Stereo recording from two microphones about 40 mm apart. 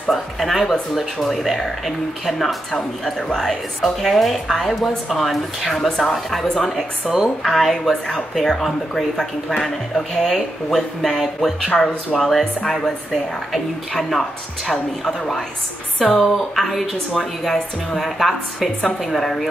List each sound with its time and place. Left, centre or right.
0.1 s speech: centre
7.1 s speech: centre
11.7 s speech: left
12.2 s speech: centre